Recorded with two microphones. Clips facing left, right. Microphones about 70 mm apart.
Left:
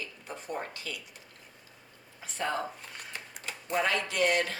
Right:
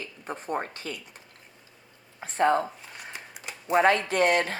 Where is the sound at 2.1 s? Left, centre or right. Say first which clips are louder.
Right 10 dB; right.